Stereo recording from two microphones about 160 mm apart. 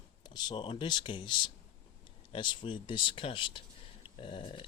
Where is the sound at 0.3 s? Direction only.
30° left (ahead or behind).